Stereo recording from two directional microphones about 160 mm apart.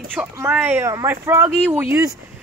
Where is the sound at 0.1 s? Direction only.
10° right (ahead or behind).